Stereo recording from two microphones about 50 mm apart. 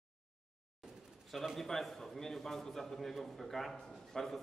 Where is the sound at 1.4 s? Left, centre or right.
Centre.